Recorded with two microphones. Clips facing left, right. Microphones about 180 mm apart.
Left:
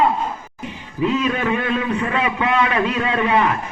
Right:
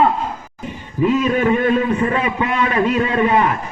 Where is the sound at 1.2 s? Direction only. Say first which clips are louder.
Right 5 dB; 45° right (ahead or behind).